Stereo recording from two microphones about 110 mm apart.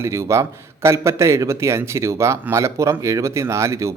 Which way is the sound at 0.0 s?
25° right (ahead or behind).